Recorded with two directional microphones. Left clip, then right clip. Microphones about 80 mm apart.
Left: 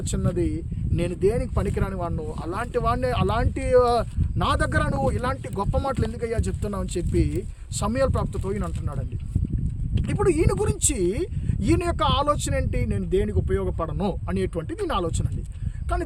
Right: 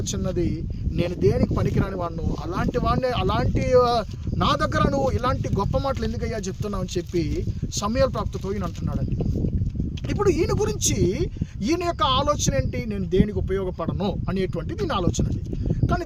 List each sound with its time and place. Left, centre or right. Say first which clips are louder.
0.1 s speech: even; left
0.9 s speech: right 1 dB; left
10.1 s speech: even; left